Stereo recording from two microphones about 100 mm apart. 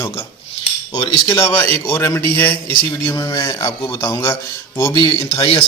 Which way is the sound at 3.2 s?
40° left (ahead or behind).